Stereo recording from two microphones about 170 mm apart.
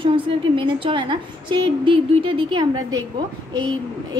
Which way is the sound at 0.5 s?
30° right (ahead or behind).